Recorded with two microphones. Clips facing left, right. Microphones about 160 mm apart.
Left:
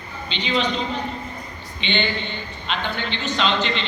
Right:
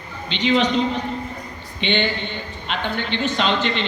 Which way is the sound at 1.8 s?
55° right (ahead or behind).